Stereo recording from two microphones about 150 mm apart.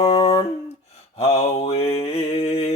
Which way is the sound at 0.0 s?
45° left (ahead or behind).